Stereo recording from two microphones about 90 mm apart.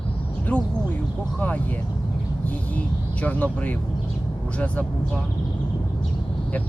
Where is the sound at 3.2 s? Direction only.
15° left (ahead or behind).